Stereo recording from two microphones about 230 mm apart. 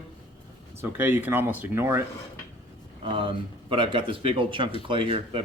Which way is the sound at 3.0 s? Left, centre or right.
Right.